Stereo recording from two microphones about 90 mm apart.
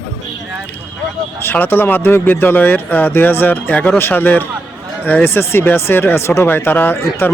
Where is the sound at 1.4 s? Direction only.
25° left (ahead or behind).